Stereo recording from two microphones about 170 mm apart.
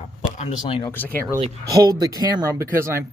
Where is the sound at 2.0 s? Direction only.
20° right (ahead or behind).